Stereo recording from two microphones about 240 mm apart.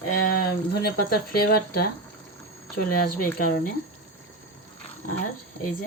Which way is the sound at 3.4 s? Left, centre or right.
Left.